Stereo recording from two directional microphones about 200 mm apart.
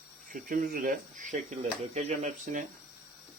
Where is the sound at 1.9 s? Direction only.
35° right (ahead or behind).